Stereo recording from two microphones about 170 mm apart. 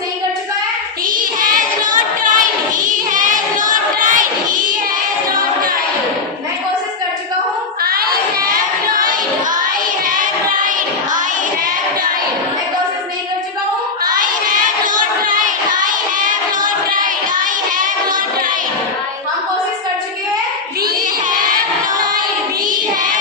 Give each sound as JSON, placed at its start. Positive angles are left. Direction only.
{"t": 1.1, "sound": "child singing", "side_deg": -55}
{"t": 7.9, "sound": "crowd", "side_deg": -60}
{"t": 14.0, "sound": "child singing", "side_deg": -50}
{"t": 16.6, "sound": "music", "side_deg": -55}